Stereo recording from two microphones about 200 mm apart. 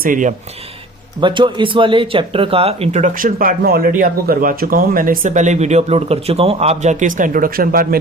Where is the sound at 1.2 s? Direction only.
25° right (ahead or behind).